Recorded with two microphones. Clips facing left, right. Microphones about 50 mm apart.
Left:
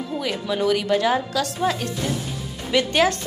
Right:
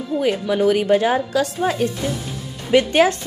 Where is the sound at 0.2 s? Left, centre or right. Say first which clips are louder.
Right 6 dB; right.